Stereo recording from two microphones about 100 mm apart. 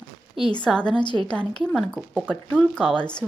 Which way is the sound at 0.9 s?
50° left (ahead or behind).